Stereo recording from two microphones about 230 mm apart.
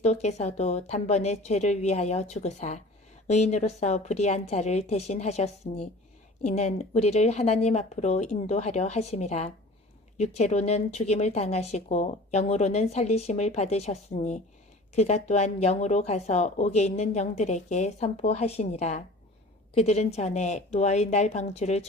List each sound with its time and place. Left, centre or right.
0.0 s speech: left